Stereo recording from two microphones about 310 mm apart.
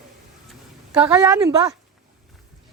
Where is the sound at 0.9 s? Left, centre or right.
Centre.